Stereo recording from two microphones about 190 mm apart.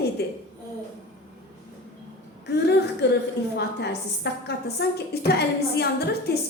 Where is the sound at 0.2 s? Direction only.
60° left (ahead or behind).